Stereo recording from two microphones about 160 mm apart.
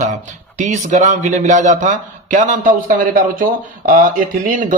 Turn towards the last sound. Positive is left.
turn(degrees=-60)  # may be behind; listen again after turning